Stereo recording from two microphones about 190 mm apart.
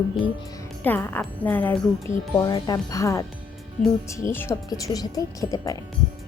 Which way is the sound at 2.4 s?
20° left (ahead or behind).